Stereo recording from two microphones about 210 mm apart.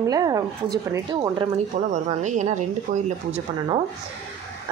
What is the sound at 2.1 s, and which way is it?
Speech, 35° right (ahead or behind).